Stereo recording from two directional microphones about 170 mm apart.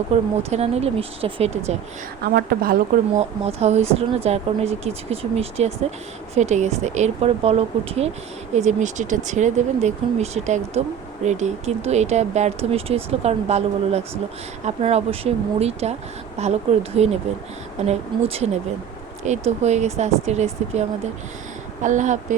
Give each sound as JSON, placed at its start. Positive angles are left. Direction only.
{"t": 0.1, "sound": "speech", "side_deg": -35}
{"t": 2.2, "sound": "a woman's voice", "side_deg": -65}
{"t": 3.2, "sound": "speech", "side_deg": -40}
{"t": 21.8, "sound": "speech", "side_deg": -45}